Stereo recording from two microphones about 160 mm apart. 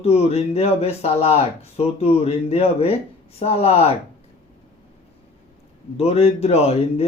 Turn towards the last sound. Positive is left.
turn(degrees=40)  # may be behind; listen again after turning